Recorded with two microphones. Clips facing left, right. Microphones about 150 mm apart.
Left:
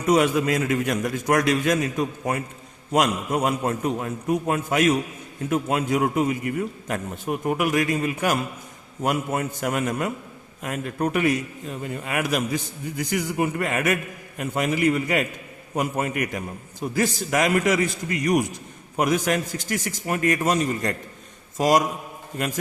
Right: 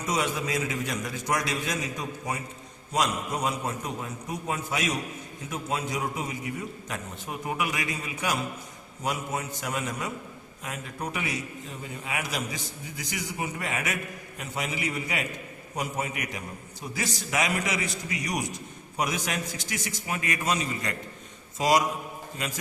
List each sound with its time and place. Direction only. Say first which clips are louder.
0.0 s a man's voice: left 9 dB; 60° left (ahead or behind)